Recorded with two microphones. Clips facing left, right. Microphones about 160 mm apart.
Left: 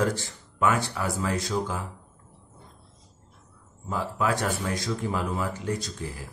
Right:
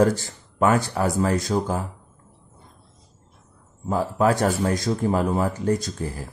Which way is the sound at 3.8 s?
40° right (ahead or behind).